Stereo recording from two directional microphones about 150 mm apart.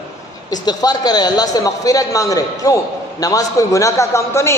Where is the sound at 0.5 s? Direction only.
25° left (ahead or behind).